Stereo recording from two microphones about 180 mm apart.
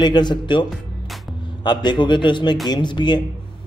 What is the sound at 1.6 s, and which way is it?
Speech, 25° left (ahead or behind).